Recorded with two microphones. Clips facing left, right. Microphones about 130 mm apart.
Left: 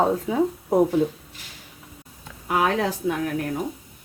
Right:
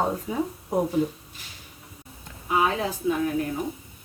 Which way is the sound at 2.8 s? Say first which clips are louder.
Left 1 dB; 80° left.